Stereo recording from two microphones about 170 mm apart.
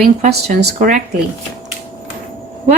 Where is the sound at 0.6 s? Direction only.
50° right (ahead or behind).